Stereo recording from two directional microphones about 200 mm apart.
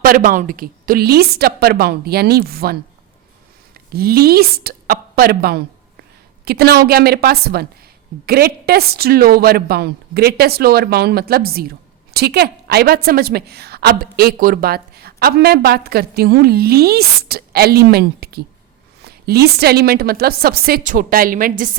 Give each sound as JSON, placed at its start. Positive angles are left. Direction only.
{"t": 0.0, "sound": "a woman's voice", "side_deg": -45}
{"t": 3.8, "sound": "a woman's voice", "side_deg": -50}